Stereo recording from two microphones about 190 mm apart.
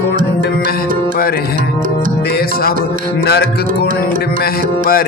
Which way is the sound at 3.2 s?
60° left (ahead or behind).